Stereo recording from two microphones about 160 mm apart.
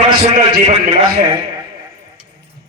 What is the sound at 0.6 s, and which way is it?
Speech, 45° right (ahead or behind).